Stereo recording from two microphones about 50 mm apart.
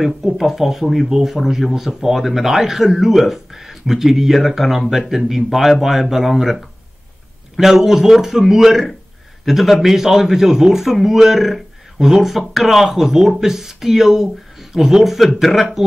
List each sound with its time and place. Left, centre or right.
0.0 s a man's voice: centre